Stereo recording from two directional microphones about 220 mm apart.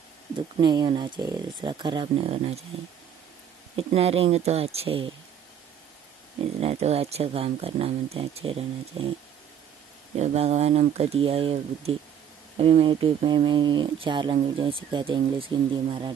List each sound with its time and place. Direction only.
0.7 s speech: 20° right (ahead or behind)
3.7 s speech: 25° right (ahead or behind)
6.6 s speech: 30° right (ahead or behind)
10.1 s speech: 30° right (ahead or behind)